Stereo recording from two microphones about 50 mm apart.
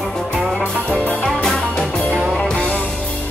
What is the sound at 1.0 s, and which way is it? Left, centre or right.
Music, left.